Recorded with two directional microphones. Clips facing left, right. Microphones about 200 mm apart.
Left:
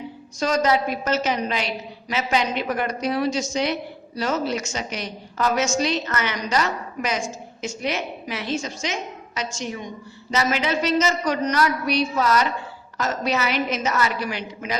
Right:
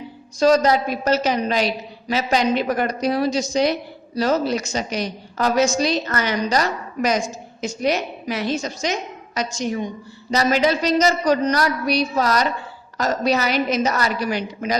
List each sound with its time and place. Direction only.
0.3 s a woman's voice: 35° right (ahead or behind)